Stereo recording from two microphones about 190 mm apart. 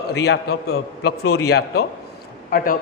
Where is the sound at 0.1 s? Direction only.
60° left (ahead or behind).